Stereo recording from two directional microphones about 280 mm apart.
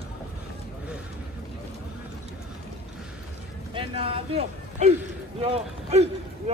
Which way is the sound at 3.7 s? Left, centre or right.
Centre.